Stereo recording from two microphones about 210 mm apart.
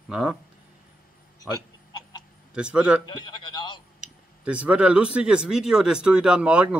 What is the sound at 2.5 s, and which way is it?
Speech, 5° right (ahead or behind).